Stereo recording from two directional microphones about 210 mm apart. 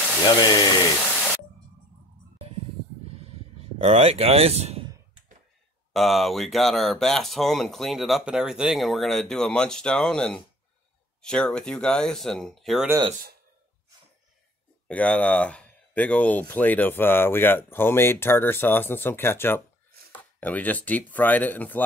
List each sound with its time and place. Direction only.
0.4 s speech: 20° left (ahead or behind)
3.3 s a sound: 25° right (ahead or behind)
5.9 s speech: centre (ahead or behind)
14.9 s speech: 5° left (ahead or behind)